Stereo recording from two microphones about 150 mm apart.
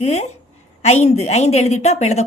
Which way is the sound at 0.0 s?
45° left (ahead or behind).